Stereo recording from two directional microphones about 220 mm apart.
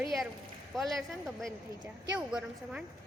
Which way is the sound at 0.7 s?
Centre (ahead or behind).